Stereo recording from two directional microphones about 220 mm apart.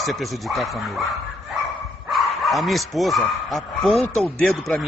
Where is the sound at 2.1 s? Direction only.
Centre (ahead or behind).